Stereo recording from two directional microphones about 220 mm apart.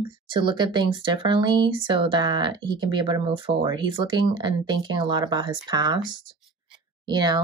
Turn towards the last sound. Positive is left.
turn(degrees=-20)  # may be behind; listen again after turning